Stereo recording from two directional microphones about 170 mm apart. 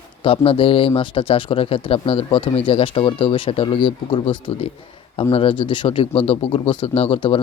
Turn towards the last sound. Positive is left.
turn(degrees=35)  # may be behind; listen again after turning